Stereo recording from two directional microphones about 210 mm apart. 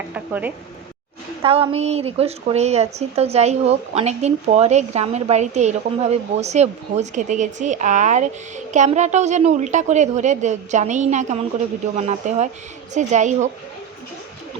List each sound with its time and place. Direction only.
0.1 s speech: 10° right (ahead or behind)
1.4 s a woman's voice: 25° right (ahead or behind)